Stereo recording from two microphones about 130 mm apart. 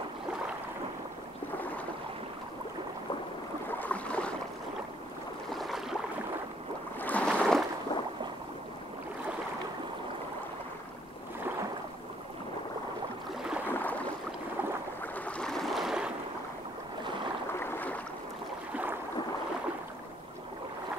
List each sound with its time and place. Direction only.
3.6 s a sound: 10° left (ahead or behind)
5.5 s a sound: centre (ahead or behind)
7.0 s boat: 10° left (ahead or behind)
7.9 s rowboat: 40° left (ahead or behind)
13.7 s boat: 15° left (ahead or behind)
15.1 s boat: 10° left (ahead or behind)
17.6 s boat: 15° left (ahead or behind)